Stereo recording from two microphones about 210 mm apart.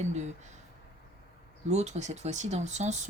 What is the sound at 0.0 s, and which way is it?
Speech, 35° right (ahead or behind).